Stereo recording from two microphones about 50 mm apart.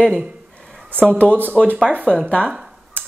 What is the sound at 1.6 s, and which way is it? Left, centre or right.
Speech, centre.